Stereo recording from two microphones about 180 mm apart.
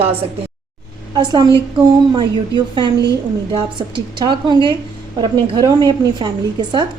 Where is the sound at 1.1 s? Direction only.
25° right (ahead or behind).